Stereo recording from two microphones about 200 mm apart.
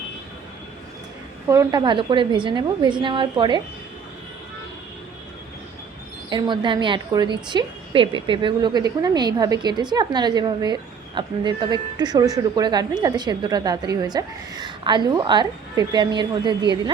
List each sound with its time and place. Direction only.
1.5 s a woman's voice: 15° right (ahead or behind)
6.3 s a woman's voice: 25° right (ahead or behind)